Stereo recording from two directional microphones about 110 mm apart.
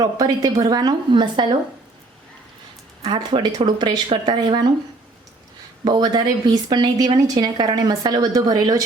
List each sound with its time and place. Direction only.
0.0 s speech: 35° right (ahead or behind)
3.0 s speech: 45° right (ahead or behind)
5.8 s speech: 40° right (ahead or behind)